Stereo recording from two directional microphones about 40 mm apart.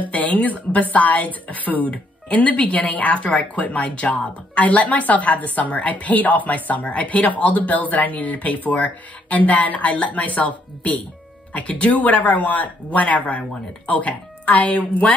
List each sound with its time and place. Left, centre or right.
0.1 s speech: left